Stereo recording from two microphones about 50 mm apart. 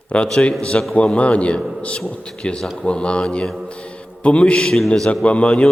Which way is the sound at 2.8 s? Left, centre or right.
Left.